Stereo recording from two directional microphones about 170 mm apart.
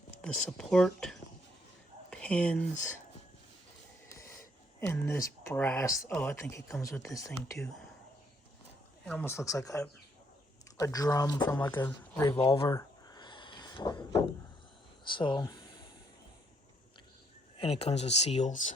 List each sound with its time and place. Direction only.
0.2 s speech: 5° left (ahead or behind)
4.1 s snort: 15° left (ahead or behind)
4.9 s speech: 15° left (ahead or behind)
9.0 s speech: 10° left (ahead or behind)
11.7 s speech: 10° left (ahead or behind)
12.4 s a sound: 30° left (ahead or behind)
17.6 s speech: 35° left (ahead or behind)